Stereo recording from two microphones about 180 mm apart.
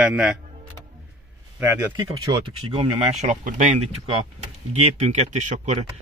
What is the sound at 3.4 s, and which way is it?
Speech, 45° right (ahead or behind).